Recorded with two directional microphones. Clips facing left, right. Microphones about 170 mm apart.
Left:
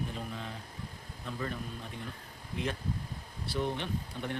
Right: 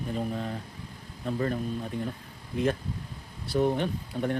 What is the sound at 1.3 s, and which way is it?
Speech, 45° right (ahead or behind).